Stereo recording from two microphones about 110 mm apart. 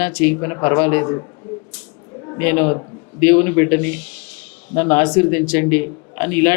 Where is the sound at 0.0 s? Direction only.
20° left (ahead or behind).